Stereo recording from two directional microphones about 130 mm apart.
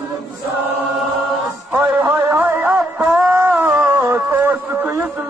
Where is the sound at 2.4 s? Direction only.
15° right (ahead or behind).